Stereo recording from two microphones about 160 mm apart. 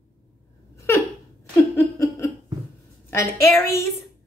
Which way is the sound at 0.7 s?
15° left (ahead or behind).